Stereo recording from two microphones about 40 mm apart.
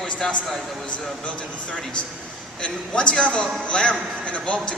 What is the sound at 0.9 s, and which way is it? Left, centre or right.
A man's voice, left.